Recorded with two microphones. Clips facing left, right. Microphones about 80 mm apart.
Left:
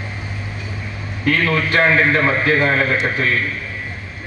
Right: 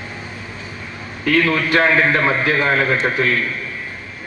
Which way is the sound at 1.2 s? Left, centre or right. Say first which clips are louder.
Right 2 dB; left.